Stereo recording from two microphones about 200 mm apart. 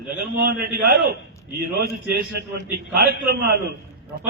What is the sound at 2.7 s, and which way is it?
Speech, 55° right (ahead or behind).